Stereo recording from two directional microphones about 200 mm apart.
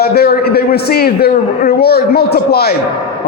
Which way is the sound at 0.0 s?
50° left (ahead or behind).